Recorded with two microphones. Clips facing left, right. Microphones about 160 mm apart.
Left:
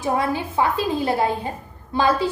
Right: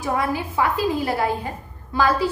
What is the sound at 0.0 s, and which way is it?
A woman's voice, 25° left (ahead or behind).